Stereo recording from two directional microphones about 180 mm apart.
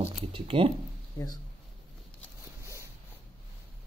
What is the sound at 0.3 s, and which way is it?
Speech, 30° right (ahead or behind).